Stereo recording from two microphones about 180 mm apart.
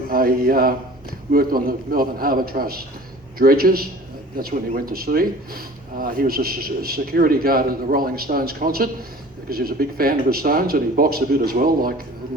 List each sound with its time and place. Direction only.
0.1 s speech: 55° right (ahead or behind)